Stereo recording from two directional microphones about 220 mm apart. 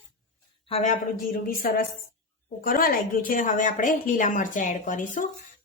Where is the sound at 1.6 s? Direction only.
40° left (ahead or behind).